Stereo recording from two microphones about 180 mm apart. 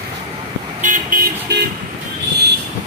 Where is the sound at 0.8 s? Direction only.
50° right (ahead or behind).